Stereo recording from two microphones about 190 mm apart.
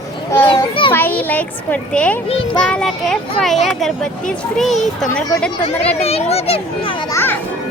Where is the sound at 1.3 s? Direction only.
10° left (ahead or behind).